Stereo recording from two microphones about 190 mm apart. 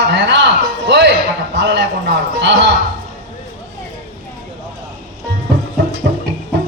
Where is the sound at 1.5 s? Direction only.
65° right (ahead or behind).